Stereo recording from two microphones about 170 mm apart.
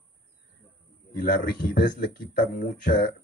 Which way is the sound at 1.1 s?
55° left (ahead or behind).